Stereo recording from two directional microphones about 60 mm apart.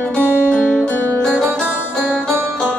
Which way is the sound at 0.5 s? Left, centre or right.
Centre.